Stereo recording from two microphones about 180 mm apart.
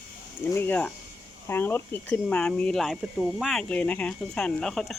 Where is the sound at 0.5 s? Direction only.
10° left (ahead or behind).